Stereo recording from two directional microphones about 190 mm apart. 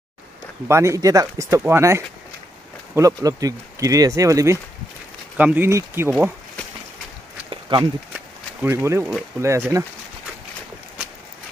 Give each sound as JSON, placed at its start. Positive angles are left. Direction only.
{"t": 0.7, "sound": "speech", "side_deg": -15}
{"t": 7.7, "sound": "speech", "side_deg": -25}
{"t": 8.1, "sound": "a sound", "side_deg": -10}
{"t": 9.4, "sound": "speech", "side_deg": -15}